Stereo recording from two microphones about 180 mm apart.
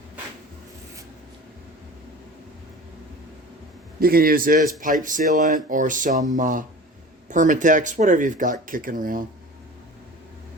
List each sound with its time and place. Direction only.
4.0 s speech: 55° right (ahead or behind)